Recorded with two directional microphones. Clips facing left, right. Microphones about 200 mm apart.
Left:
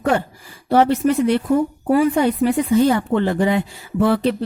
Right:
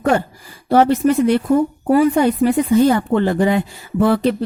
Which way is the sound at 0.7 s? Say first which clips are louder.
Right 2 dB; 45° right (ahead or behind).